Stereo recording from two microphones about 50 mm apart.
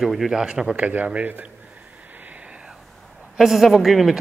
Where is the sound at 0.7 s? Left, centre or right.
Right.